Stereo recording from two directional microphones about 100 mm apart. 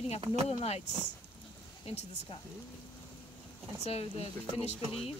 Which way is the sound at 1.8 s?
85° left.